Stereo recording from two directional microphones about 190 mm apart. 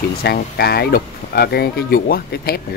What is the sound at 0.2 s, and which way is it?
Speech, 55° left (ahead or behind).